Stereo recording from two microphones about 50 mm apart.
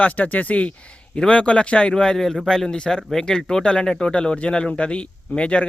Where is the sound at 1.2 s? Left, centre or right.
Left.